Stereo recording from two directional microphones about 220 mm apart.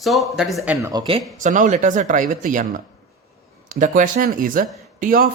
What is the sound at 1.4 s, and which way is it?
Speech, 35° right (ahead or behind).